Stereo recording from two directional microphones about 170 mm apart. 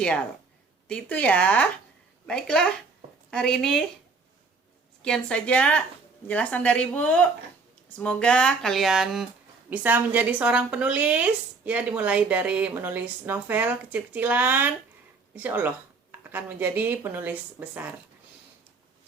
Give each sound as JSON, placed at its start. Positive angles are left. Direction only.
{"t": 0.0, "sound": "speech", "side_deg": 5}
{"t": 5.0, "sound": "a woman's voice", "side_deg": 5}